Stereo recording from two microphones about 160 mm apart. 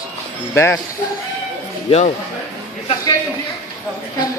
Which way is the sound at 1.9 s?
45° left (ahead or behind).